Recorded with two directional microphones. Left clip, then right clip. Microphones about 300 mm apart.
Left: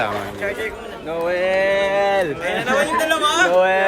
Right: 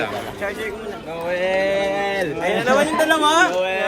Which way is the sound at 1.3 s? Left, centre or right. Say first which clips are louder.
Left 1 dB; centre.